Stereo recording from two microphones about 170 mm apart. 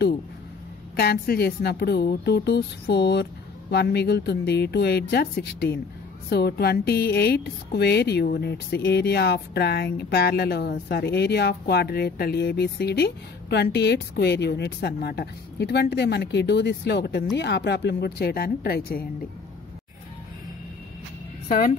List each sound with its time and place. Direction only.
0.9 s speech: 65° left (ahead or behind)
21.5 s a woman's voice: 55° left (ahead or behind)